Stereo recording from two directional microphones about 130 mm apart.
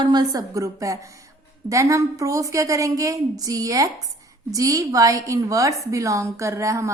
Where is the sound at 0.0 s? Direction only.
30° right (ahead or behind).